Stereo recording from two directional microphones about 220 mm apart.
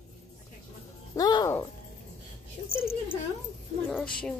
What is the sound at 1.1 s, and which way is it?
Speech, 15° left (ahead or behind).